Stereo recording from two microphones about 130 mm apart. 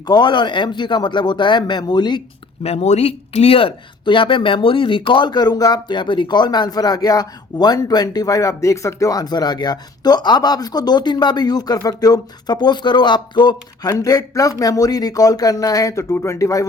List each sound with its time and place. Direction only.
0.0 s speech: 35° left (ahead or behind)
2.6 s speech: 55° left (ahead or behind); by 16.6 s 25° left (ahead or behind)